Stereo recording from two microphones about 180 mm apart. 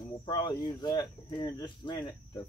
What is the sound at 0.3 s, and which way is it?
Speech, 25° left (ahead or behind).